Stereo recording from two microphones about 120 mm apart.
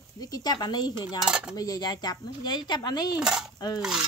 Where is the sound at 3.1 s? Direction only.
5° right (ahead or behind).